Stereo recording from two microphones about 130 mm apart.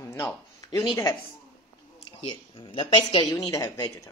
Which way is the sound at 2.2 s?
40° left (ahead or behind).